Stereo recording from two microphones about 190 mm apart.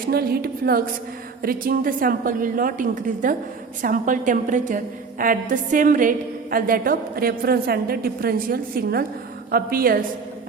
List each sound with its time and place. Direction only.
0.1 s a woman's voice: 55° right (ahead or behind)